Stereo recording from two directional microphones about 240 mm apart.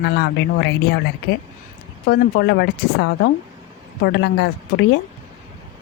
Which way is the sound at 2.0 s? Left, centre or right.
Left.